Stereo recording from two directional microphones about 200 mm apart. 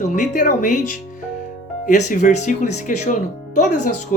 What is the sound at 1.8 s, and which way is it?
Speech, 35° left (ahead or behind).